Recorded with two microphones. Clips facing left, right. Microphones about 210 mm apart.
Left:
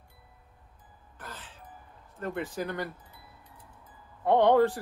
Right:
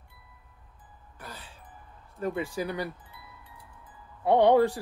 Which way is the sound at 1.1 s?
10° right (ahead or behind).